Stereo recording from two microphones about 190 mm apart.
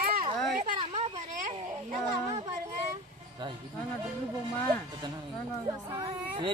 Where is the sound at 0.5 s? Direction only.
35° right (ahead or behind).